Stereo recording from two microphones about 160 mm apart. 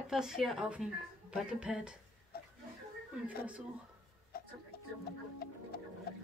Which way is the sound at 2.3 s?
75° left (ahead or behind).